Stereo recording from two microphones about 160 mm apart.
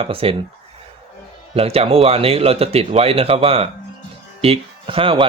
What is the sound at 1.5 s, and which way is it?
Speech, 40° right (ahead or behind).